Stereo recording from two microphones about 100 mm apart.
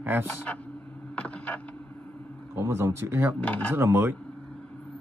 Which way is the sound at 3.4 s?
15° left (ahead or behind).